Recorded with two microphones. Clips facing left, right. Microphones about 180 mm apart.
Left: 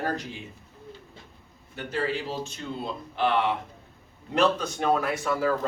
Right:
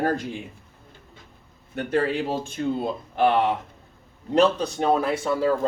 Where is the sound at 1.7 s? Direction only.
55° right (ahead or behind).